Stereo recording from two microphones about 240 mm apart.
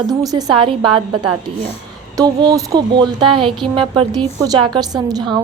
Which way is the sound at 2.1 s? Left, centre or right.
Centre.